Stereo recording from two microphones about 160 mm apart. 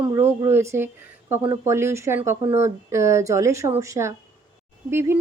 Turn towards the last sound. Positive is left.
turn(degrees=-15)  # may be behind; listen again after turning